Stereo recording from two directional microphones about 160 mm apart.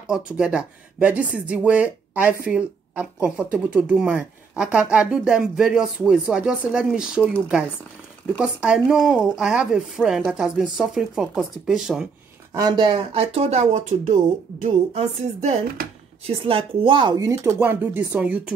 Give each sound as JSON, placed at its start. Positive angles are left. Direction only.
{"t": 0.0, "sound": "speech", "side_deg": -5}
{"t": 8.4, "sound": "speech", "side_deg": -5}
{"t": 12.5, "sound": "speech", "side_deg": -25}